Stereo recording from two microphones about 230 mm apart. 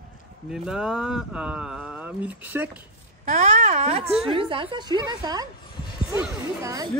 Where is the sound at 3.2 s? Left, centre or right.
Right.